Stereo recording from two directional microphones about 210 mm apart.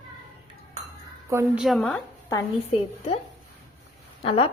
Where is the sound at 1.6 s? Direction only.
Centre (ahead or behind).